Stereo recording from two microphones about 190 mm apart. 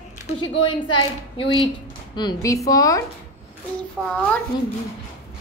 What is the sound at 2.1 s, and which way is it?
Speech, 20° left (ahead or behind).